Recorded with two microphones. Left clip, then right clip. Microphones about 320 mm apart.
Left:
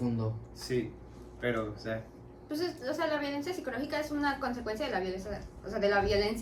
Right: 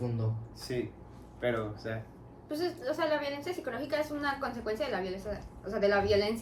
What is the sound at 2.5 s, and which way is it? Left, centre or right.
A woman's voice, centre.